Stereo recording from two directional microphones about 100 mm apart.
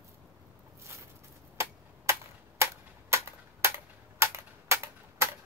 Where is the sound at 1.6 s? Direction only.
25° right (ahead or behind).